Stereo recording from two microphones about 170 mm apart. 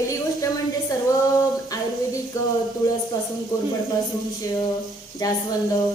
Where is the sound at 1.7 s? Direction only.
20° left (ahead or behind).